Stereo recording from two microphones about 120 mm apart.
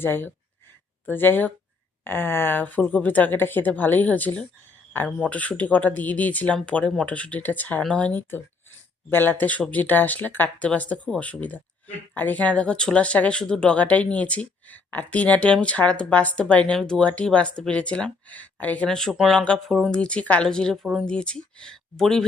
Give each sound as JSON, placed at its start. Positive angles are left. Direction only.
{"t": 0.0, "sound": "speech", "side_deg": 20}